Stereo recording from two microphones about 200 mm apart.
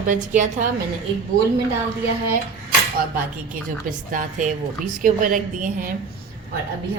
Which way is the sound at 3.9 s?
40° right (ahead or behind).